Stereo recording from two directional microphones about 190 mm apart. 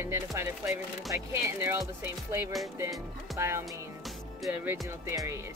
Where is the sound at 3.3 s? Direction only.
15° right (ahead or behind).